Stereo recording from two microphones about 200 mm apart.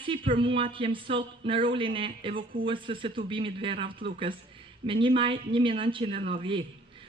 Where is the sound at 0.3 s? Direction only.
25° right (ahead or behind).